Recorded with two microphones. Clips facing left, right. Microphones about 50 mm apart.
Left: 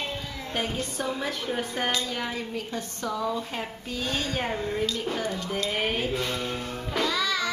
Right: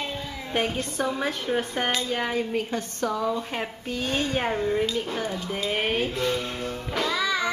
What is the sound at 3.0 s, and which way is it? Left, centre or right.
Speech, centre.